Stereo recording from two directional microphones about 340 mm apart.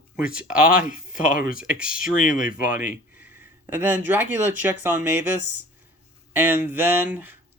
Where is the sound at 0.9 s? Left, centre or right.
Left.